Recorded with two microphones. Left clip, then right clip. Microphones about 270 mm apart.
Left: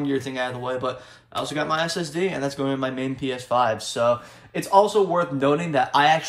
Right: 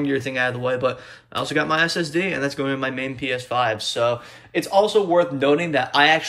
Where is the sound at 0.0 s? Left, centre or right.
Centre.